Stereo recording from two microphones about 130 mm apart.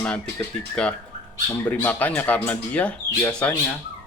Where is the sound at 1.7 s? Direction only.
15° left (ahead or behind).